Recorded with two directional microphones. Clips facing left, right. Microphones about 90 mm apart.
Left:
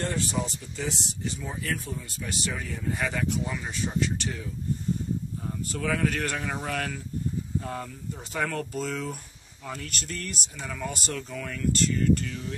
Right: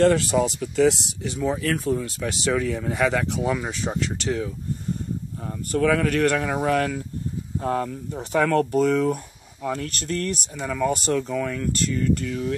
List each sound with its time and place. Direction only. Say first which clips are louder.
0.0 s speech: right 11 dB; 90° right
5.7 s speech: right 8 dB; 55° right (ahead or behind)